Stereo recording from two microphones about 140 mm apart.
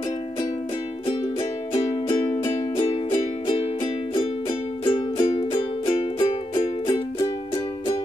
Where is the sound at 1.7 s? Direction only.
35° left (ahead or behind).